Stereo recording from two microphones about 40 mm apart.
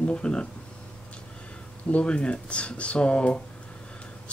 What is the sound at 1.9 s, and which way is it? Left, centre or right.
Speech, left.